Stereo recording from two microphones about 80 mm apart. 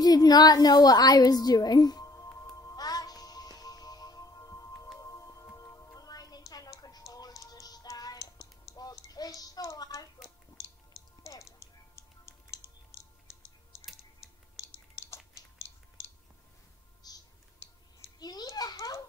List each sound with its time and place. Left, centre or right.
0.0 s a woman's voice: left
2.5 s music: left
5.9 s music: left
8.7 s tick: left
11.2 s music: left
17.0 s music: left
18.2 s a sound: left